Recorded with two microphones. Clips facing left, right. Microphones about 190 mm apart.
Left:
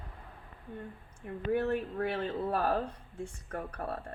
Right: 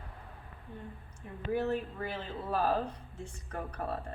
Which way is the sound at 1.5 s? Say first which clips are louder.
Left 1 dB; 55° left (ahead or behind).